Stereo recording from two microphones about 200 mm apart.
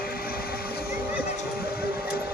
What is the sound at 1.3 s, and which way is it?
Vehicle, 50° left (ahead or behind).